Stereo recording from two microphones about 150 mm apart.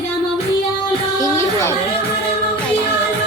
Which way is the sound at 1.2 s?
15° left (ahead or behind).